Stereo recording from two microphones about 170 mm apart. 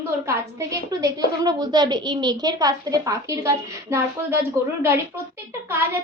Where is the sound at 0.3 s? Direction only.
20° right (ahead or behind).